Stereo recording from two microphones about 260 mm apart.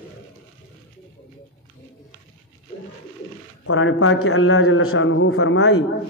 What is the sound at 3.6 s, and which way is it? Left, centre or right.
A man's voice, left.